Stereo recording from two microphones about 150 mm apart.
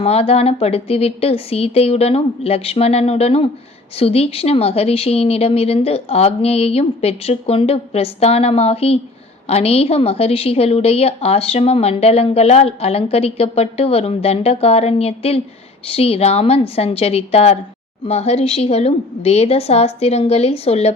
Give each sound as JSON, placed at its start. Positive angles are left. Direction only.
{"t": 0.0, "sound": "a woman's voice", "side_deg": 40}